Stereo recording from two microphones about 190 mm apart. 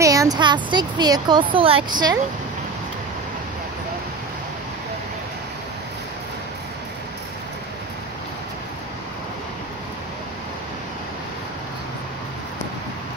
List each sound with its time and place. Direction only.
0.0 s speech: 15° right (ahead or behind)